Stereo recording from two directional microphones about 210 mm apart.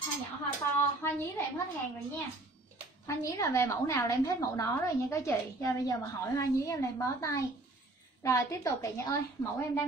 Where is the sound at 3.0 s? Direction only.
15° left (ahead or behind).